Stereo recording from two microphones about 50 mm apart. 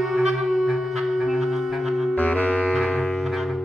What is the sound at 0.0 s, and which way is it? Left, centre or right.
Music, centre.